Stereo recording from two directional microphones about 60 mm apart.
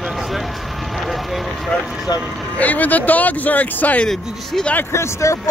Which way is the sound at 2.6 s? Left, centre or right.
Left.